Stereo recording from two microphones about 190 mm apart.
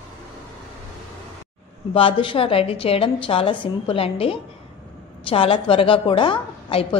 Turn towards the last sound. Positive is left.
turn(degrees=25)  # may be behind; listen again after turning